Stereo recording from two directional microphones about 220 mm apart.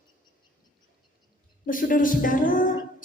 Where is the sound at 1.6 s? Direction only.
40° left (ahead or behind).